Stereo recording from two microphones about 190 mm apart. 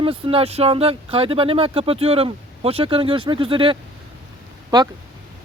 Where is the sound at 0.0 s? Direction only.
30° right (ahead or behind).